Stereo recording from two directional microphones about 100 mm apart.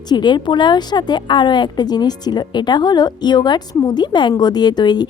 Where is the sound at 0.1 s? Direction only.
50° left (ahead or behind).